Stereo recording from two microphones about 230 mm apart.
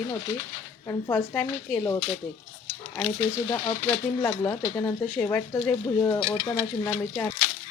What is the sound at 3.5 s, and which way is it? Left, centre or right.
Speech, centre.